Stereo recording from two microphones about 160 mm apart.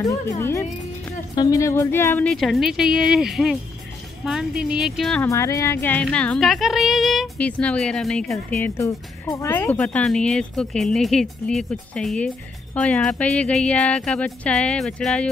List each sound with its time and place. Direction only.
0.0 s speech: 20° left (ahead or behind)
2.2 s speech: centre (ahead or behind)
5.3 s speech: 20° left (ahead or behind)